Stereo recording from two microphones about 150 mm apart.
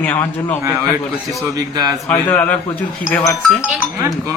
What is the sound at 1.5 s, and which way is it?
Speech, 25° right (ahead or behind).